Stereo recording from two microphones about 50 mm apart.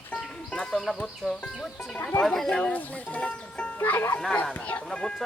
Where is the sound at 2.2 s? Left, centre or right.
Centre.